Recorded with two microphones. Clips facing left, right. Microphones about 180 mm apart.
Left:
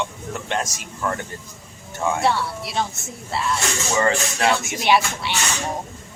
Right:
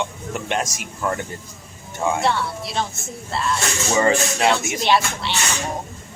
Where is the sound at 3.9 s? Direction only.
20° right (ahead or behind).